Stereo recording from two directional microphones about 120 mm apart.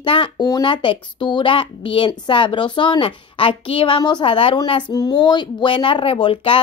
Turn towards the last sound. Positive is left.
turn(degrees=45)  # may be behind; listen again after turning